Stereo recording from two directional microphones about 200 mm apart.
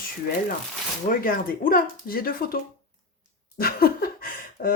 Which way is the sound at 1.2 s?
45° left (ahead or behind).